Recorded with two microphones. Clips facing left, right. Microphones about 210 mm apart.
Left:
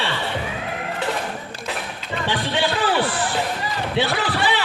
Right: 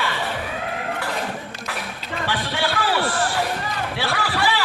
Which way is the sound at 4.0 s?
20° left (ahead or behind).